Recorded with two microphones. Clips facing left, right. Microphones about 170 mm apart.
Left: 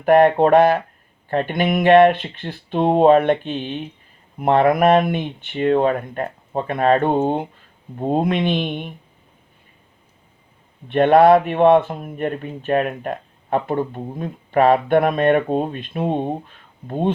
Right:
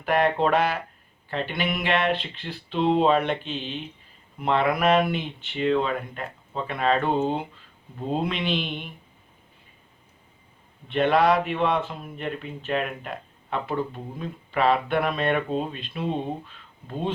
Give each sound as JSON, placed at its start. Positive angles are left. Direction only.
{"t": 0.0, "sound": "speech", "side_deg": 50}
{"t": 10.8, "sound": "speech", "side_deg": 55}